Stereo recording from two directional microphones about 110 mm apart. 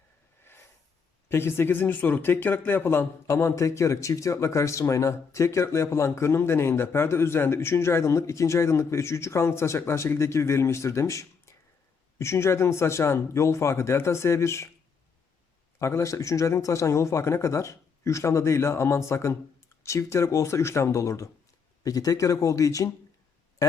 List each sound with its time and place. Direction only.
1.3 s speech: 20° left (ahead or behind)
15.8 s speech: 25° left (ahead or behind)